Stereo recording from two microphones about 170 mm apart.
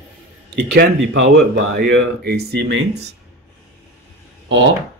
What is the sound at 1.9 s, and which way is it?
Speech, 75° right (ahead or behind).